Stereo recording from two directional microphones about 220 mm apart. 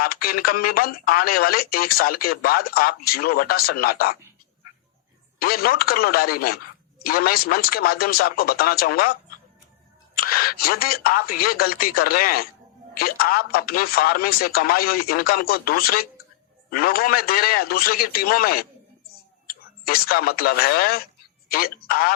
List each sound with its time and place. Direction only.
0.0 s speech: 40° left (ahead or behind)
5.4 s speech: 45° left (ahead or behind)
10.2 s speech: 45° left (ahead or behind)